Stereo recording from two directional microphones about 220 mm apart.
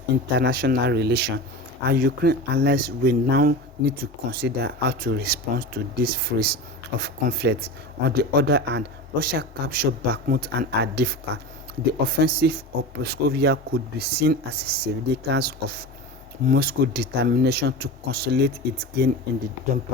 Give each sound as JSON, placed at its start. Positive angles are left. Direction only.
{"t": 0.3, "sound": "speech", "side_deg": -45}